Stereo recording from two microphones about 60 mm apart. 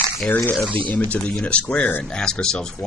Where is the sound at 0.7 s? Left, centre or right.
Left.